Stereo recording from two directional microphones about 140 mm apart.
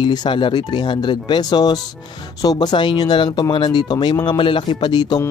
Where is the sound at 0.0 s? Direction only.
35° left (ahead or behind).